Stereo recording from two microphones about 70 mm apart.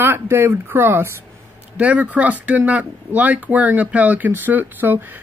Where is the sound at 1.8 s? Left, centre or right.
Right.